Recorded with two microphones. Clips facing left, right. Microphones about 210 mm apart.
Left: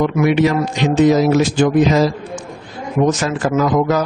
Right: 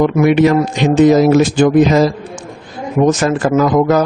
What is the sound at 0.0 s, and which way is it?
A man's voice, 50° right (ahead or behind).